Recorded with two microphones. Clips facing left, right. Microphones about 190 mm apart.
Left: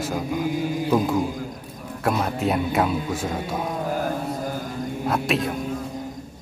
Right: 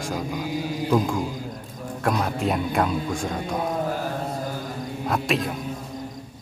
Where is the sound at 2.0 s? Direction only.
5° left (ahead or behind).